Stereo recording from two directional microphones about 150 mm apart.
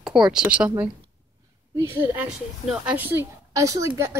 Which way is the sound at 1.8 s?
15° right (ahead or behind).